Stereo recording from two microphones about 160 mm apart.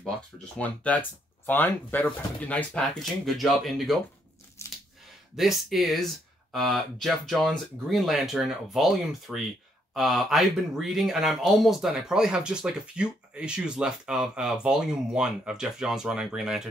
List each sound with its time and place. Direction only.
0.6 s speech: 10° left (ahead or behind)
4.6 s a sound: 15° left (ahead or behind)
5.3 s speech: centre (ahead or behind)